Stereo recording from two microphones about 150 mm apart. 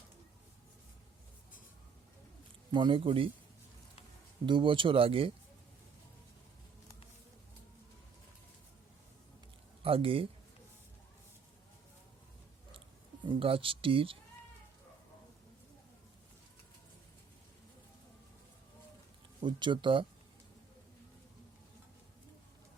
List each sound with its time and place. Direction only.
2.7 s speech: 35° right (ahead or behind)
4.4 s speech: 35° right (ahead or behind)
9.8 s a man's voice: 40° right (ahead or behind)
13.2 s speech: 35° right (ahead or behind)
19.4 s speech: 30° right (ahead or behind)